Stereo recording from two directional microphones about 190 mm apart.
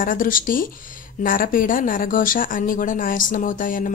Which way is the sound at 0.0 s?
45° left (ahead or behind).